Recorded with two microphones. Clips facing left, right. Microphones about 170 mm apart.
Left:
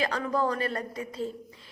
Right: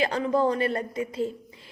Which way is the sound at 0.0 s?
30° right (ahead or behind).